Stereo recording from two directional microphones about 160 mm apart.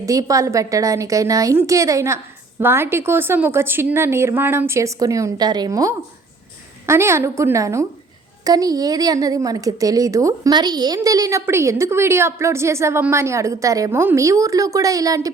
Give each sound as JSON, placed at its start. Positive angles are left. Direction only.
{"t": 0.0, "sound": "a woman's voice", "side_deg": -20}